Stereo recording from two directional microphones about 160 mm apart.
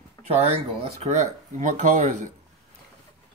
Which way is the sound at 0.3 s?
40° right (ahead or behind).